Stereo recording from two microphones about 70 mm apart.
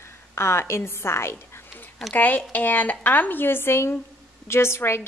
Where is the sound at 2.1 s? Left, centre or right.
Left.